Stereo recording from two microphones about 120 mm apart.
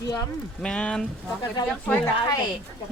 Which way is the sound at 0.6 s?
5° left (ahead or behind).